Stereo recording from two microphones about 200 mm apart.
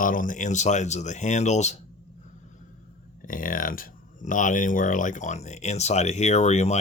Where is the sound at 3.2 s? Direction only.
45° left (ahead or behind).